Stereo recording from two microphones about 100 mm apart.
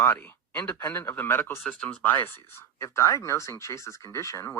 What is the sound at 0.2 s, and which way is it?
Speech, 15° left (ahead or behind).